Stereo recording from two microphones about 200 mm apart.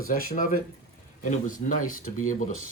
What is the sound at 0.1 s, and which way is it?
Speech, 45° left (ahead or behind).